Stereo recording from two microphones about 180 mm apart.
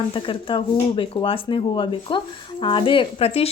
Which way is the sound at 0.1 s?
30° left (ahead or behind).